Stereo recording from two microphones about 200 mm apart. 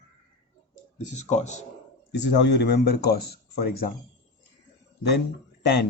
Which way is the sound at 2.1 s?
60° left (ahead or behind).